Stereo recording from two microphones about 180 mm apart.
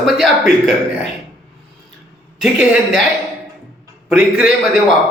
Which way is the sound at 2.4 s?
Centre (ahead or behind).